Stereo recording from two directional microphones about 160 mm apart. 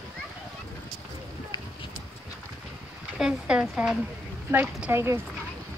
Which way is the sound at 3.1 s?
5° right (ahead or behind).